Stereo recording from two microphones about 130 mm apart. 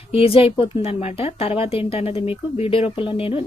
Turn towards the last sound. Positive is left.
turn(degrees=45)  # may be behind; listen again after turning